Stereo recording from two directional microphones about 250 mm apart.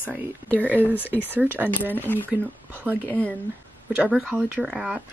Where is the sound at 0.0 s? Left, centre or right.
Centre.